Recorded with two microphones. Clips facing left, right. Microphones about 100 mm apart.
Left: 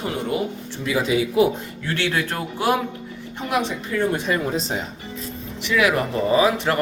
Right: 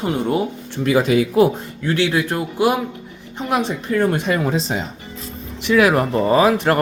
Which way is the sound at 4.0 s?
70° right (ahead or behind).